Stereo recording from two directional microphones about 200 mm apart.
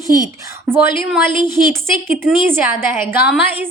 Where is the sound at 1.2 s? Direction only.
20° left (ahead or behind).